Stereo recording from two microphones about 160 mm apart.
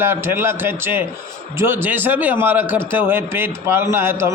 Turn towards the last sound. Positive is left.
turn(degrees=-15)  # may be behind; listen again after turning